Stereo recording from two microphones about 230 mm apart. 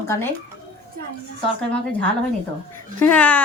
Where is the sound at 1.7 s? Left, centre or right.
Centre.